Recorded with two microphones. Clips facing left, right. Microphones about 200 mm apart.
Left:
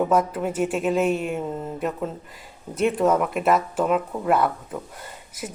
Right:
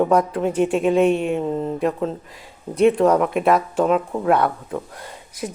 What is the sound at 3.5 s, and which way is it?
Speech, 45° right (ahead or behind).